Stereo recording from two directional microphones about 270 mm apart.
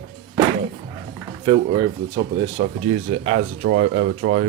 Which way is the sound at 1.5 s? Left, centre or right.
Centre.